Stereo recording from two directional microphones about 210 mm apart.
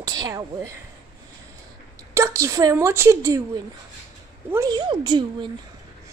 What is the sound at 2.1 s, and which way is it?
A woman's voice, 15° right (ahead or behind).